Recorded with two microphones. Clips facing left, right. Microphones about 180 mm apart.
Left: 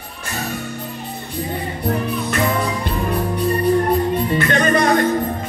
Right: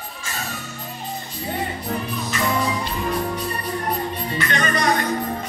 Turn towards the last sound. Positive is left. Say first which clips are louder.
# left 6 dB
turn(degrees=50)  # may be behind; listen again after turning